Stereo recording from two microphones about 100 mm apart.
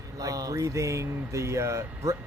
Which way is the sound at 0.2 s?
35° right (ahead or behind).